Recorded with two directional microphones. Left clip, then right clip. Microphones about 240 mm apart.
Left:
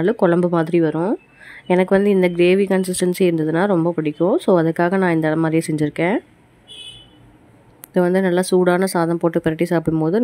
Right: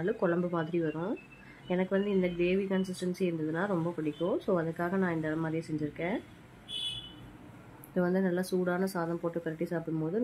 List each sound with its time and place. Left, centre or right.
0.0 s a woman's voice: left
7.9 s a woman's voice: left